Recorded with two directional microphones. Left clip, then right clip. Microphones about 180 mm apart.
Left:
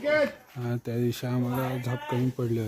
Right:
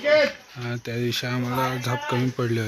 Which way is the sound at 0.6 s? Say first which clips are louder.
Right 2 dB; 30° left (ahead or behind).